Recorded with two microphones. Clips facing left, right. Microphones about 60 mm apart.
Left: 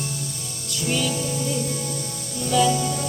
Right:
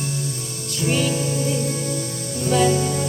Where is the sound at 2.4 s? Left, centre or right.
Right.